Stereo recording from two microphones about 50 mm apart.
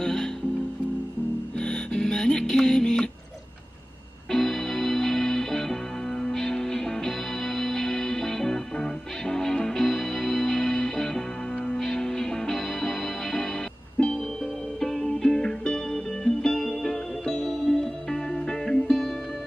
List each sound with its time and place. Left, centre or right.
0.0 s music: centre
1.6 s music: centre
4.3 s music: centre
14.0 s music: left
14.8 s music: centre